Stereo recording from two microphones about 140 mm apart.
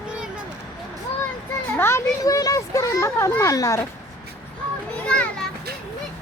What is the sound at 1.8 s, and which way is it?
A child's voice, 20° left (ahead or behind).